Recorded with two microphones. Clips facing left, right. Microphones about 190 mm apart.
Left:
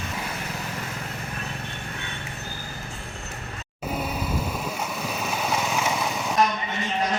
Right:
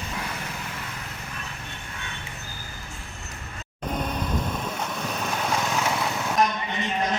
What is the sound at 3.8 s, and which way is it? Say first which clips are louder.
Vehicle: even; 5° left (ahead or behind).